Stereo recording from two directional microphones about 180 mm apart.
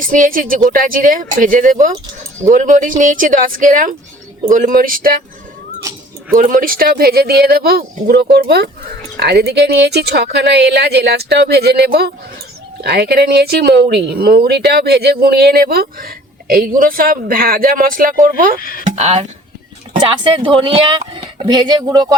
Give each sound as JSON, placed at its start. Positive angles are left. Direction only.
{"t": 0.0, "sound": "speech", "side_deg": -50}
{"t": 6.3, "sound": "speech", "side_deg": -50}
{"t": 18.6, "sound": "speech", "side_deg": 50}
{"t": 18.9, "sound": "speech", "side_deg": -35}